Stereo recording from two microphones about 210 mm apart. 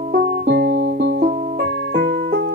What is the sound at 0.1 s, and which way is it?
Music, 50° right (ahead or behind).